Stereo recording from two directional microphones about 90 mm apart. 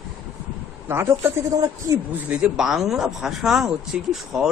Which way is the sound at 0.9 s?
25° right (ahead or behind).